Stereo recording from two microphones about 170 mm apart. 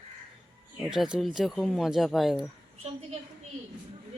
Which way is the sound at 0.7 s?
Centre (ahead or behind).